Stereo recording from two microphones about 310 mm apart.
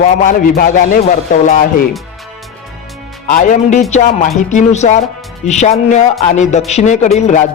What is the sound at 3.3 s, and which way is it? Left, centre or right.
A man's voice, left.